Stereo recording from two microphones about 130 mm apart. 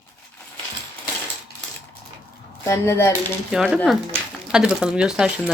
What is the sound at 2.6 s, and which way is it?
Speech, 25° left (ahead or behind).